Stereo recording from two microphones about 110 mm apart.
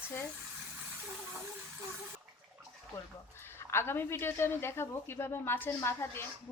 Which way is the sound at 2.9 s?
20° left (ahead or behind).